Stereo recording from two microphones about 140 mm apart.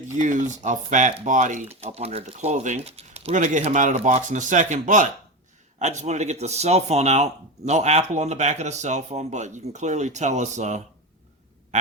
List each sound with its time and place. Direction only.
0.1 s speech: 60° right (ahead or behind)